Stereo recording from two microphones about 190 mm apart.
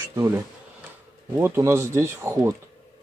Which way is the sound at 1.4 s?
15° right (ahead or behind).